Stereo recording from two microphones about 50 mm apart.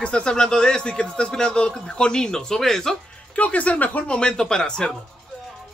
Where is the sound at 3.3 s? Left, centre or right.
Left.